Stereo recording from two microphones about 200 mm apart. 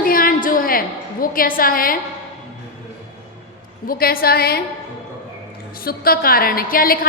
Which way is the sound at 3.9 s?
50° left (ahead or behind).